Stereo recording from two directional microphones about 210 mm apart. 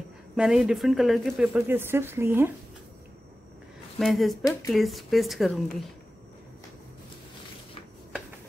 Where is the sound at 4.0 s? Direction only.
Centre (ahead or behind).